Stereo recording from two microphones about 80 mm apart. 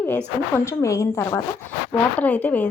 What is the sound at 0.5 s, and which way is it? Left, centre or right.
Speech, left.